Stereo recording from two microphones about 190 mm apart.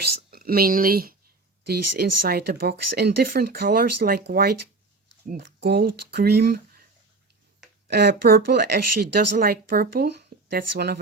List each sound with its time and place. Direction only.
0.2 s speech: 50° right (ahead or behind)
7.9 s speech: 60° right (ahead or behind)